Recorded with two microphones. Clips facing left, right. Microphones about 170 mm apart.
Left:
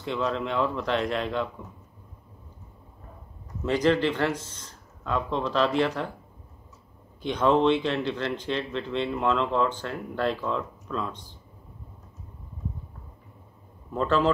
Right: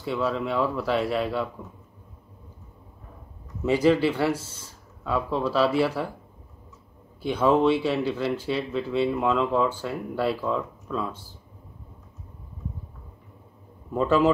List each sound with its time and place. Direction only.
0.0 s speech: 5° right (ahead or behind)
3.6 s speech: 10° right (ahead or behind)
7.2 s speech: 5° right (ahead or behind)
13.9 s speech: 10° right (ahead or behind)